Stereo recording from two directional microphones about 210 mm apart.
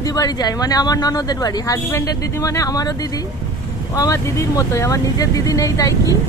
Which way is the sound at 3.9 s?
15° left (ahead or behind).